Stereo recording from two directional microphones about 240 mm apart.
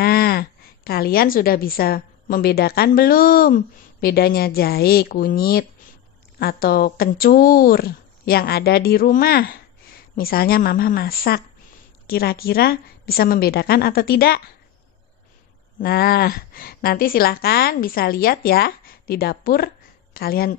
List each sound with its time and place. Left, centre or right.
0.0 s a woman's voice: left
15.8 s a woman's voice: left